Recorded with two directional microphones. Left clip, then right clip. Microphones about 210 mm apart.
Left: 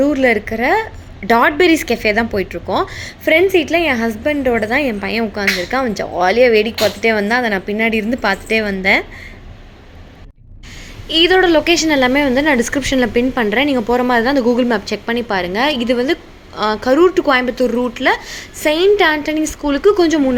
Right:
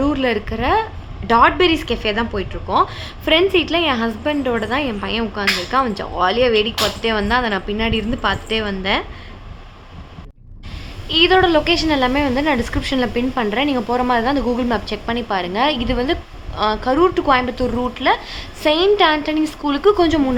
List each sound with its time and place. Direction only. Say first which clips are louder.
0.0 s a woman's voice: left 5 dB; 10° left (ahead or behind)
11.1 s a woman's voice: left 2 dB; 15° left (ahead or behind)